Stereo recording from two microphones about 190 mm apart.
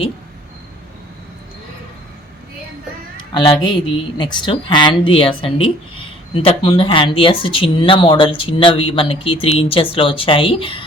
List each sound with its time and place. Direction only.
3.3 s speech: 25° left (ahead or behind)